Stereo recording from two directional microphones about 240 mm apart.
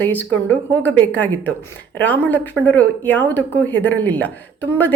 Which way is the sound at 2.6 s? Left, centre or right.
Centre.